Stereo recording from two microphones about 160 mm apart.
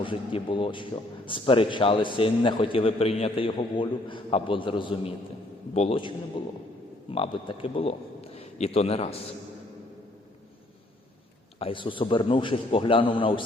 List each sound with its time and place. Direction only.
0.0 s a man's voice: 30° left (ahead or behind)
11.6 s a man's voice: 30° left (ahead or behind)